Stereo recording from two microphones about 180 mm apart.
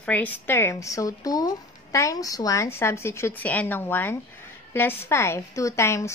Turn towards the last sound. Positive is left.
turn(degrees=15)  # may be behind; listen again after turning